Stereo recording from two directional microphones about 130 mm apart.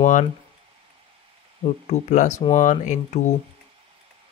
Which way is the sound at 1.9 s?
65° left (ahead or behind).